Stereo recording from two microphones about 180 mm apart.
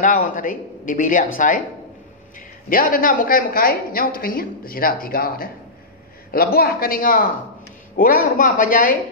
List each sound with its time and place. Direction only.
0.0 s a woman's voice: 50° left (ahead or behind)
2.7 s a woman's voice: 50° left (ahead or behind)